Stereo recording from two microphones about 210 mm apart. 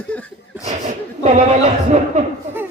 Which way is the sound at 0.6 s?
35° right (ahead or behind).